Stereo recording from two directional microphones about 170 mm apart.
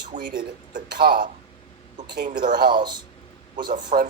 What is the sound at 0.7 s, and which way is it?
Speech, 60° right (ahead or behind).